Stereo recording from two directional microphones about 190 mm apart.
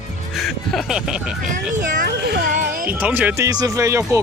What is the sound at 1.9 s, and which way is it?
Speech, 55° right (ahead or behind).